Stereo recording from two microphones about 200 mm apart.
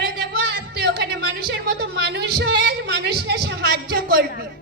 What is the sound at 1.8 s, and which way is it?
A woman's voice, 55° right (ahead or behind).